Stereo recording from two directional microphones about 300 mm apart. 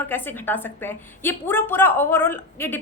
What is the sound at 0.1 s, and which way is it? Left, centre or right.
A woman's voice, centre.